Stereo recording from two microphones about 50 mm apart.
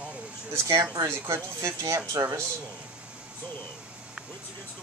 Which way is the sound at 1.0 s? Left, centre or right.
Right.